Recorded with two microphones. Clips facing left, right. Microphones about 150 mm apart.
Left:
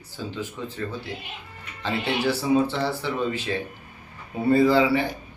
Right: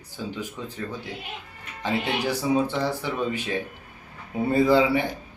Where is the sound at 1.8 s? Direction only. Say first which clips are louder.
Left 1 dB; 15° right (ahead or behind).